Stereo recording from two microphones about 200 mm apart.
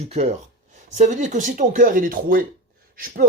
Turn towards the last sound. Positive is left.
turn(degrees=-45)  # may be behind; listen again after turning